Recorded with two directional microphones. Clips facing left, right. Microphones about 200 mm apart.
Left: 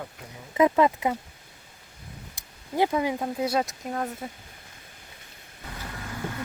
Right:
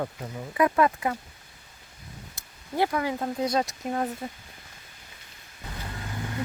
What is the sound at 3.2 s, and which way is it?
Speech, 10° left (ahead or behind).